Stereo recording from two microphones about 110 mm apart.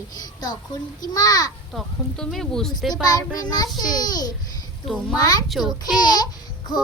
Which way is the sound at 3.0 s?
35° left (ahead or behind).